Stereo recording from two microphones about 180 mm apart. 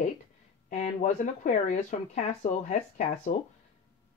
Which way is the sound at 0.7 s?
40° left (ahead or behind).